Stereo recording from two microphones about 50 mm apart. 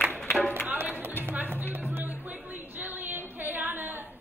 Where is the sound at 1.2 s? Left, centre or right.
Right.